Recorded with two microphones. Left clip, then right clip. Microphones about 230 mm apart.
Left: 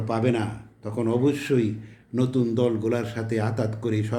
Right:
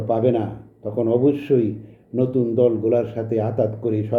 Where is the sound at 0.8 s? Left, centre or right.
Left.